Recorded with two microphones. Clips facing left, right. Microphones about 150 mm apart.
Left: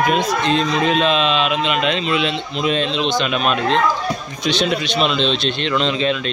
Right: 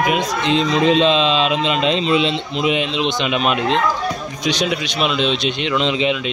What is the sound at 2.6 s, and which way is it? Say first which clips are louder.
Speech: even; 15° right (ahead or behind).